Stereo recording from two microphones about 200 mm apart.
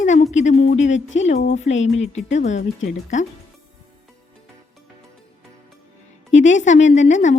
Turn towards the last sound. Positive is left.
turn(degrees=35)  # may be behind; listen again after turning